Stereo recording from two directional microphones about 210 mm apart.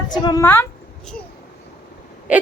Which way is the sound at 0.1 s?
20° left (ahead or behind).